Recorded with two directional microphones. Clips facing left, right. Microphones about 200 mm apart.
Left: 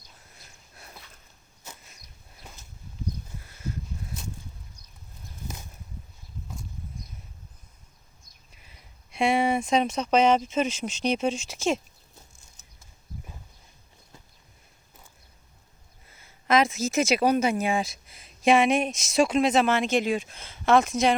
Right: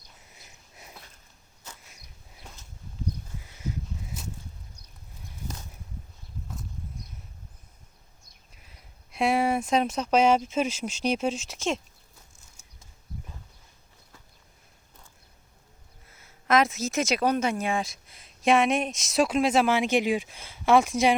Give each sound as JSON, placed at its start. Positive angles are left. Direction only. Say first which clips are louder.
{"t": 0.3, "sound": "sniff", "louder": "even", "side_deg": -15}
{"t": 2.4, "sound": "a sound", "louder": "even", "side_deg": 5}
{"t": 3.4, "sound": "crow", "louder": "right 1 dB", "side_deg": -15}
{"t": 8.5, "sound": "speech", "louder": "even", "side_deg": 0}
{"t": 12.6, "sound": "a sound", "louder": "left 1 dB", "side_deg": -10}
{"t": 16.0, "sound": "speech", "louder": "left 1 dB", "side_deg": 0}